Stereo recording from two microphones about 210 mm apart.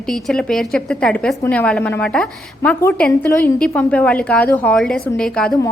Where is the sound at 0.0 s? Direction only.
Centre (ahead or behind).